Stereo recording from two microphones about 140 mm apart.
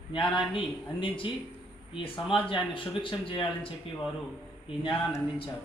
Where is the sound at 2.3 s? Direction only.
40° left (ahead or behind).